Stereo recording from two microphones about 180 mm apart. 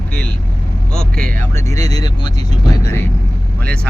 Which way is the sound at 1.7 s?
20° left (ahead or behind).